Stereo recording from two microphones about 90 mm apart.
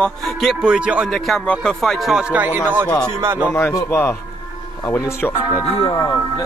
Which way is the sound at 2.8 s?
10° left (ahead or behind).